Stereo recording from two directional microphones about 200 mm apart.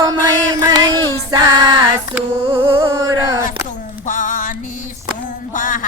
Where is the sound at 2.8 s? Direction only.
15° right (ahead or behind).